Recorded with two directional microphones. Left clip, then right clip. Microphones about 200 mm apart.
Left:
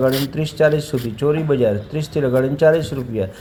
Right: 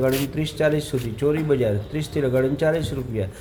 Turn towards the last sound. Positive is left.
turn(degrees=15)  # may be behind; listen again after turning